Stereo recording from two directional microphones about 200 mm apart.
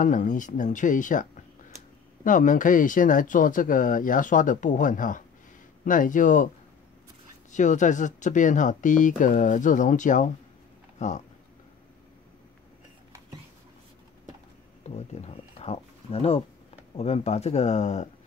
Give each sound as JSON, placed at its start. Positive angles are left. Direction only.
{"t": 0.0, "sound": "speech", "side_deg": 40}
{"t": 7.5, "sound": "speech", "side_deg": 40}
{"t": 14.8, "sound": "speech", "side_deg": 30}